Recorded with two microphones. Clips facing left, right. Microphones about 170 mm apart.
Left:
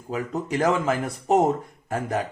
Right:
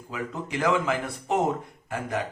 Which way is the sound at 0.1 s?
40° left (ahead or behind).